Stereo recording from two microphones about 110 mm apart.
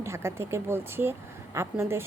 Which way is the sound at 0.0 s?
25° right (ahead or behind).